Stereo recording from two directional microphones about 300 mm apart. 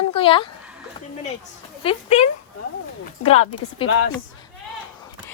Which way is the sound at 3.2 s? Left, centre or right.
Centre.